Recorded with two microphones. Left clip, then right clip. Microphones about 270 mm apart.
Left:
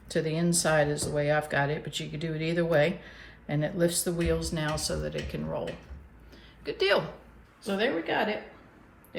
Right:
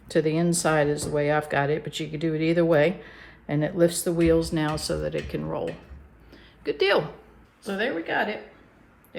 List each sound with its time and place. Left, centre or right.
0.1 s speech: right
6.3 s a sound: right
7.6 s a woman's voice: centre